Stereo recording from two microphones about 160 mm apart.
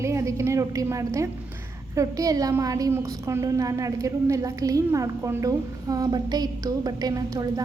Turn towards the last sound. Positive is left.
turn(degrees=-20)  # may be behind; listen again after turning